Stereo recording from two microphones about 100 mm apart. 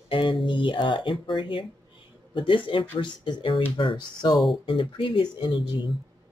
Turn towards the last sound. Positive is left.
turn(degrees=55)  # may be behind; listen again after turning